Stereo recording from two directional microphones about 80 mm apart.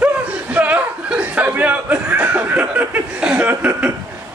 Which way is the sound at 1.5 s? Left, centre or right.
Centre.